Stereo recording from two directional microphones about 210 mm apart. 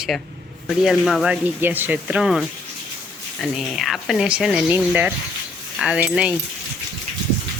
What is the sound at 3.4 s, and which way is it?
Speech, centre (ahead or behind).